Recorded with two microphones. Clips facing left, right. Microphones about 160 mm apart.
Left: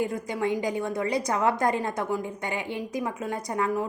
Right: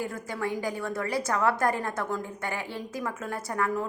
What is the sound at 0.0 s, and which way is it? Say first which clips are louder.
Speech: left 4 dB; 15° left (ahead or behind).